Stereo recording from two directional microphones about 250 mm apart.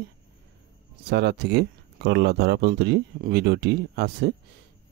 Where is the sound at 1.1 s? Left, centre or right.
Right.